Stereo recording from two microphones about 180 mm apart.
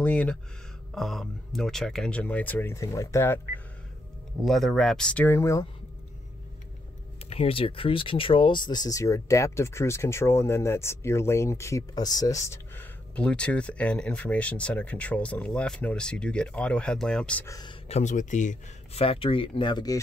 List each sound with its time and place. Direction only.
0.0 s speech: 10° left (ahead or behind)
4.4 s speech: centre (ahead or behind)
7.2 s speech: 30° left (ahead or behind); by 17.5 s 5° left (ahead or behind)
17.5 s speech: 20° left (ahead or behind)
17.8 s speech: 40° left (ahead or behind); by 20.0 s 25° left (ahead or behind)